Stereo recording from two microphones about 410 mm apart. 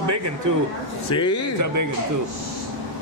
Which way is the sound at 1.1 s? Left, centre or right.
Centre.